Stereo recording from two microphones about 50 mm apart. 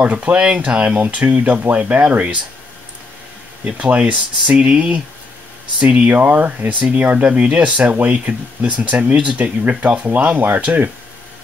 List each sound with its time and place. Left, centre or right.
0.0 s speech: right
3.7 s speech: right